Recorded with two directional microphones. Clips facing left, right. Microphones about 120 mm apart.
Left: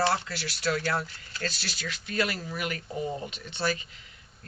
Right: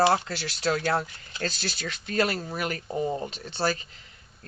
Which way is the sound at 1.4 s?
35° right (ahead or behind).